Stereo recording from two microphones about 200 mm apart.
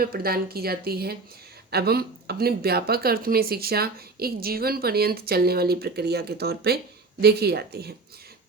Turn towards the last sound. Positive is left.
turn(degrees=-55)  # may be behind; listen again after turning